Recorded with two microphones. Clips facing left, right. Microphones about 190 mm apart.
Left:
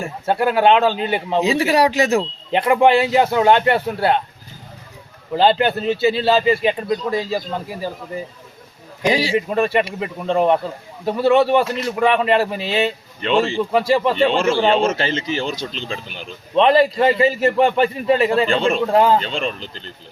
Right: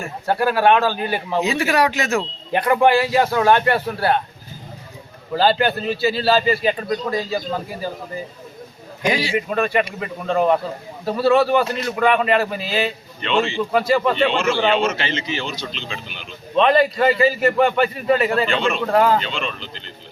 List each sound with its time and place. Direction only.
0.0 s a man's voice: 20° left (ahead or behind)
2.1 s a man's voice: 20° left (ahead or behind)
5.3 s a man's voice: 20° left (ahead or behind)
9.0 s a man's voice: 30° left (ahead or behind)
13.2 s a man's voice: 40° left (ahead or behind)
13.7 s a man's voice: 30° left (ahead or behind)
16.6 s a man's voice: 25° left (ahead or behind)
19.2 s a man's voice: 40° left (ahead or behind)